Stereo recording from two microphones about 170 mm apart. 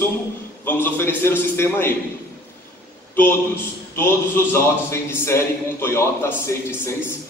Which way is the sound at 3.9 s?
15° left (ahead or behind).